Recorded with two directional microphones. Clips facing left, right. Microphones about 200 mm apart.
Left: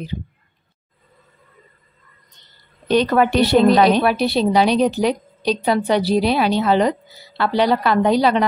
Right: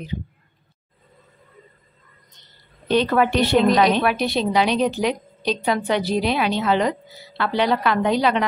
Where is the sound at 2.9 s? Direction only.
40° left (ahead or behind).